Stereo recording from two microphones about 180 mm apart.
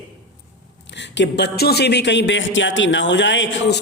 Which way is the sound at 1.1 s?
70° left (ahead or behind).